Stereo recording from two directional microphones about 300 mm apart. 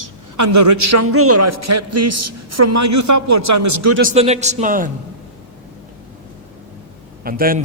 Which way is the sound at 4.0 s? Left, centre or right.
Right.